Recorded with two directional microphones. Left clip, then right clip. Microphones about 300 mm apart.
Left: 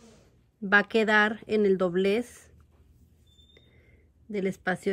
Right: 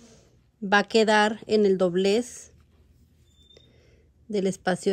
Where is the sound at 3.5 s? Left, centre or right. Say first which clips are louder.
Right 3 dB; centre.